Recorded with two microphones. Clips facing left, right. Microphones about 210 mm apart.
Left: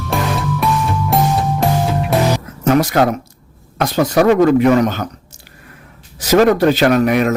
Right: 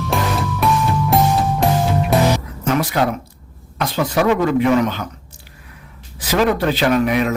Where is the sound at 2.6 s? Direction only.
40° left (ahead or behind).